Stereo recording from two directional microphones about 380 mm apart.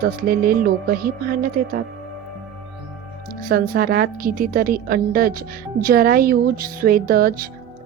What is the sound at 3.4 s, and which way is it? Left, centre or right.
A woman's voice, right.